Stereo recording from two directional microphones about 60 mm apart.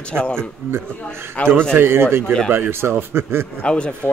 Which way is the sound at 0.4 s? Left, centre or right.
Right.